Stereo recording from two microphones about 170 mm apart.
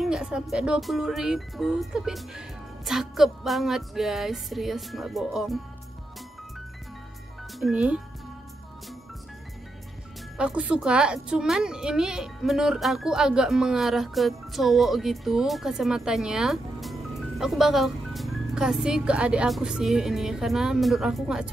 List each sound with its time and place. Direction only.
0.0 s a child's voice: 5° right (ahead or behind)
7.5 s speech: 5° right (ahead or behind)
10.3 s a child's voice: 5° right (ahead or behind)